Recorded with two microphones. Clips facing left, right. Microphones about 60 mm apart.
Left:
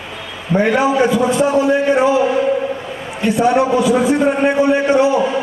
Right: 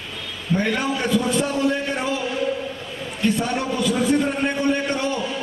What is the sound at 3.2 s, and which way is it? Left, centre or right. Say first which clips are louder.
A man's voice: left 9 dB; centre.